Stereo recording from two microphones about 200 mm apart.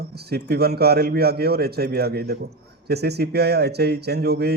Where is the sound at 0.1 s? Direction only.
55° right (ahead or behind).